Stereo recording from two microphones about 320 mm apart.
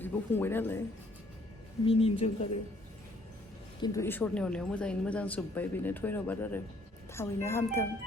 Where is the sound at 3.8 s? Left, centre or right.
Centre.